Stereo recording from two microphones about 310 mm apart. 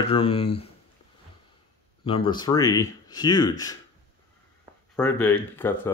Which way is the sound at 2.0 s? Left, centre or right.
Centre.